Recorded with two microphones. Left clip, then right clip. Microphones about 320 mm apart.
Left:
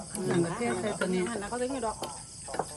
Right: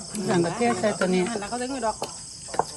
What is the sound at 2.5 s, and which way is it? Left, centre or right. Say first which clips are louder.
Cricket: right 8 dB; right.